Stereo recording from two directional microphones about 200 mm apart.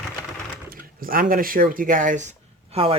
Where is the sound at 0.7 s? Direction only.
45° right (ahead or behind).